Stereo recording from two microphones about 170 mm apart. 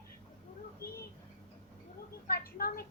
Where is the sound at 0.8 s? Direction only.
15° left (ahead or behind).